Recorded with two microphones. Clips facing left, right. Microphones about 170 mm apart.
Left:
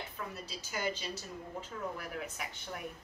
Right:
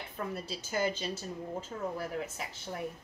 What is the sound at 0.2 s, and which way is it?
Speech, 45° right (ahead or behind).